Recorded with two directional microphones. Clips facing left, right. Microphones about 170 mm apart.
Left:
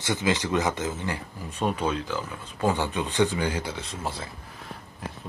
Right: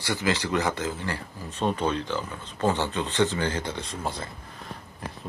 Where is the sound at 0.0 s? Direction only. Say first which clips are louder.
Left 1 dB; 20° left (ahead or behind); by 4.3 s 5° left (ahead or behind).